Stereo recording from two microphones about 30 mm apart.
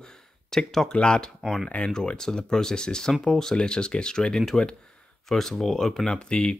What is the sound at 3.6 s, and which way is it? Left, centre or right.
Speech, left.